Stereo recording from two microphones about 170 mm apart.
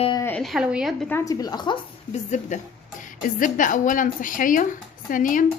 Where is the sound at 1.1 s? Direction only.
20° left (ahead or behind).